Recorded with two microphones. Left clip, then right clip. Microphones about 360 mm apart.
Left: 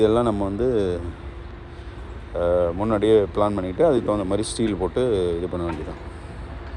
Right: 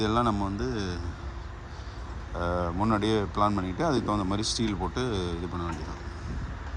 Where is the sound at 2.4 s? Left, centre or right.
Centre.